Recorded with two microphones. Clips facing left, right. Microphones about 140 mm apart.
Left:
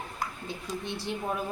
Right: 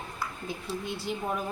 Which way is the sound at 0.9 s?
Centre (ahead or behind).